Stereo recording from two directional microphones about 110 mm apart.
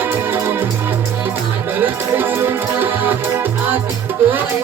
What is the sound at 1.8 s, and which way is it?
Music, 20° right (ahead or behind).